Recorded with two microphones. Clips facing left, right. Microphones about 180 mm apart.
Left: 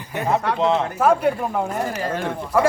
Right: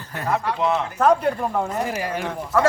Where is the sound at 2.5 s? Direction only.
10° left (ahead or behind).